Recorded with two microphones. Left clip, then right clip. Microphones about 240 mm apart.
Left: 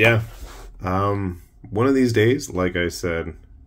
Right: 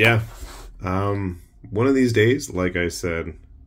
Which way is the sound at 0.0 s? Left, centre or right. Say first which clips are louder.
Left 1 dB; centre.